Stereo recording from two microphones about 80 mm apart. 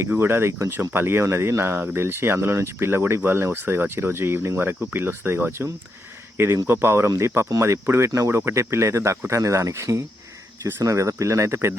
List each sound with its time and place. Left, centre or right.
0.1 s speech: right